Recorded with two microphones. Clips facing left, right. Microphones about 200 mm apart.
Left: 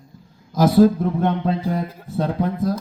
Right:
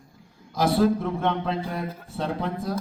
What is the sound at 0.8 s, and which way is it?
A man's voice, 40° left (ahead or behind).